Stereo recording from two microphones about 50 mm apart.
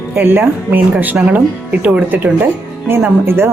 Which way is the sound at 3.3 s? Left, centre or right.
Right.